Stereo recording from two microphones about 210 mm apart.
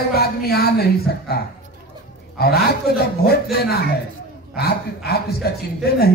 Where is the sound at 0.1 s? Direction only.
50° left (ahead or behind).